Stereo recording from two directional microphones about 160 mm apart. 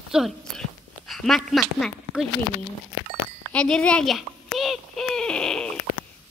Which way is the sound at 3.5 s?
5° left (ahead or behind).